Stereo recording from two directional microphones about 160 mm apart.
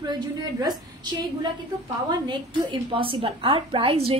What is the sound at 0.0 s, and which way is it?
A woman's voice, 25° right (ahead or behind).